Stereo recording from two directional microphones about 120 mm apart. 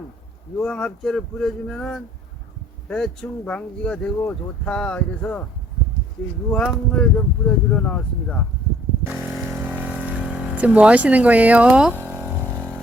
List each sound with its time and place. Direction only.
0.6 s speech: 10° left (ahead or behind)
6.5 s speech: 10° left (ahead or behind)
9.0 s vehicle: 15° right (ahead or behind)
12.0 s a sound: 15° right (ahead or behind)